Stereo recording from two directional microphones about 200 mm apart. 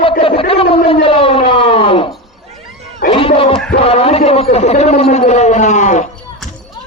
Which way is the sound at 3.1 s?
25° left (ahead or behind).